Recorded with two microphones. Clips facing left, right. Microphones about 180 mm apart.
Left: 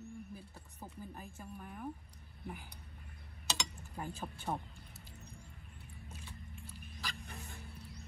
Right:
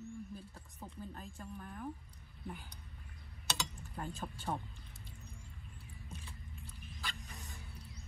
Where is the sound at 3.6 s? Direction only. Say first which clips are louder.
Even; 15° left (ahead or behind).